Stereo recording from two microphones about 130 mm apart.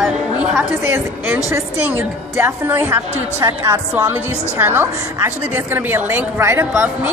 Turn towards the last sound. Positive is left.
turn(degrees=-15)  # may be behind; listen again after turning